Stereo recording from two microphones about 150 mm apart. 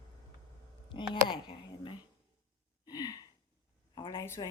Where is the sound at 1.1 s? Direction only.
35° left (ahead or behind).